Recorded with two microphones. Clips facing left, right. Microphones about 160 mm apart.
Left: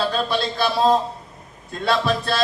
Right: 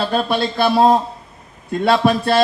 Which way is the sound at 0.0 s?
55° right (ahead or behind).